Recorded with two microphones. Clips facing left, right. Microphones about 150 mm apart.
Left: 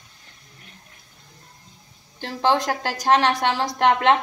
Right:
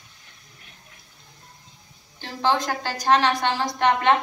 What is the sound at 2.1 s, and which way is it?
A woman's voice, 80° left.